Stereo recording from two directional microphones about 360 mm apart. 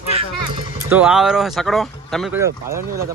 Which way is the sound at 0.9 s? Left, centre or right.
Centre.